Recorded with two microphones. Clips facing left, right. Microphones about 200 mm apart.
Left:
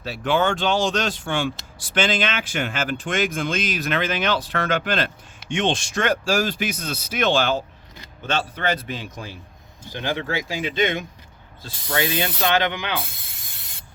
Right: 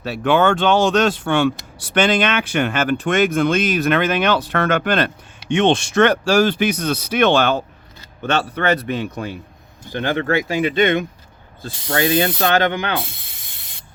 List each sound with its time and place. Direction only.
0.0 s speech: 60° right (ahead or behind)
11.9 s speech: 45° right (ahead or behind)